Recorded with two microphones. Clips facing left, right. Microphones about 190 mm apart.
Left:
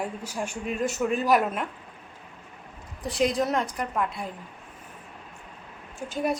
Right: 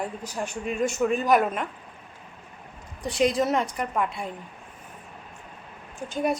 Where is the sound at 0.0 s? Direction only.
10° left (ahead or behind).